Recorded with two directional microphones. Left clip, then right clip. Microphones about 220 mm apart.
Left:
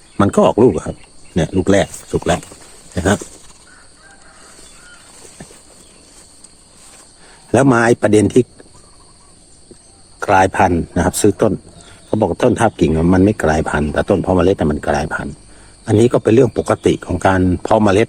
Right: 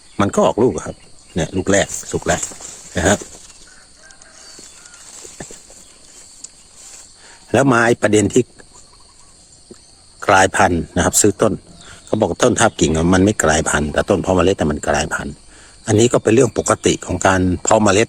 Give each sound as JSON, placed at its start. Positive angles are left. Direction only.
{"t": 0.2, "sound": "speech", "side_deg": 0}
{"t": 7.5, "sound": "speech", "side_deg": -10}
{"t": 10.2, "sound": "speech", "side_deg": -15}